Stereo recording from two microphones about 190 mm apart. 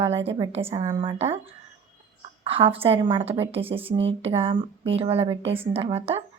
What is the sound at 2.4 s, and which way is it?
A woman's voice, 30° right (ahead or behind).